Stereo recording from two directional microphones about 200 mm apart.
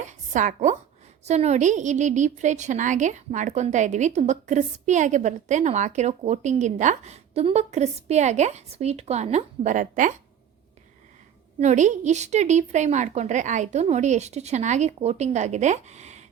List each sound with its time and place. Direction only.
0.0 s a sound: 40° right (ahead or behind)
1.2 s a woman's voice: 35° right (ahead or behind)
11.6 s a woman's voice: 35° right (ahead or behind)